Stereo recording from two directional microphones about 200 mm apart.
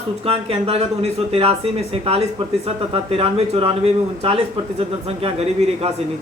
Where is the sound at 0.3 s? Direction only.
30° right (ahead or behind).